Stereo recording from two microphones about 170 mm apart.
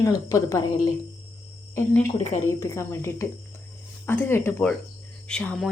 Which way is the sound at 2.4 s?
15° left (ahead or behind).